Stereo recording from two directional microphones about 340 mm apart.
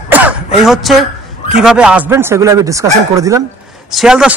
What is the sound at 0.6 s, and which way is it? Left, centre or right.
A woman's voice, centre.